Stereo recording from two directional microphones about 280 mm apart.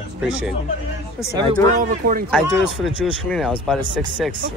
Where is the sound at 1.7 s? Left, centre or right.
Right.